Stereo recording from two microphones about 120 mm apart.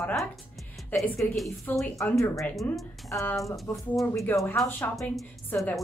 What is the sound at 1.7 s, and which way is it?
Speech, centre (ahead or behind).